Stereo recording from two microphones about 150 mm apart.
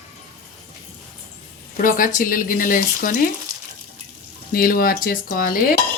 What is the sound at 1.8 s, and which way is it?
Speech, 65° left (ahead or behind).